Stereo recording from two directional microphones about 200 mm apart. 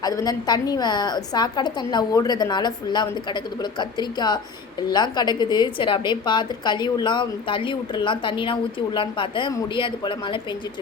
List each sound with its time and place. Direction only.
0.0 s a woman's voice: 20° left (ahead or behind)